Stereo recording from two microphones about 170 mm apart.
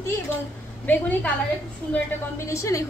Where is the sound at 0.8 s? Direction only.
10° left (ahead or behind).